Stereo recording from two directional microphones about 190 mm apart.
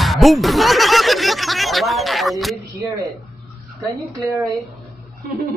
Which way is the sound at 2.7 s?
15° right (ahead or behind).